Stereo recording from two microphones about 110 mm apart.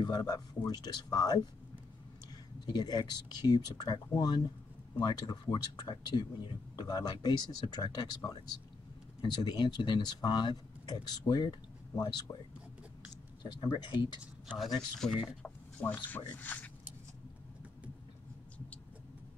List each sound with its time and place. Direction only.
0.0 s speech: 40° left (ahead or behind)
2.6 s speech: 40° left (ahead or behind)
13.4 s speech: 45° left (ahead or behind)
15.0 s speech: 5° right (ahead or behind)
15.4 s speech: 15° left (ahead or behind)